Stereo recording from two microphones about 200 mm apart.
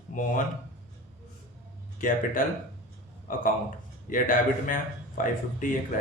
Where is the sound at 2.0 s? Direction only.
40° left (ahead or behind).